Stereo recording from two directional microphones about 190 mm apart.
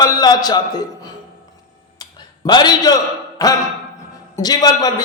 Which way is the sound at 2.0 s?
20° left (ahead or behind).